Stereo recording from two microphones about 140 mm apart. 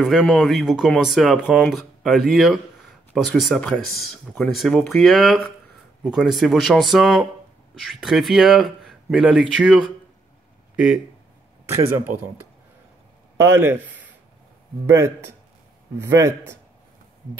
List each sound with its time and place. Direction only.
0.0 s speech: centre (ahead or behind)
13.4 s a man's voice: 15° right (ahead or behind)